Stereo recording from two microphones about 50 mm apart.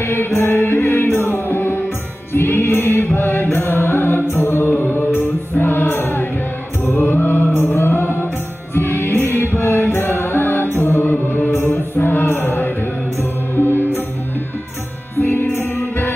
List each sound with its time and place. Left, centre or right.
0.0 s music: left
4.6 s music: left
15.1 s music: left